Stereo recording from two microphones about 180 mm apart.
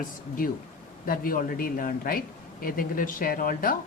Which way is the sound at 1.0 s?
50° left (ahead or behind).